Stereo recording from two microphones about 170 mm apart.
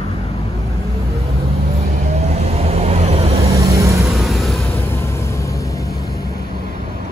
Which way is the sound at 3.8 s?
20° right (ahead or behind).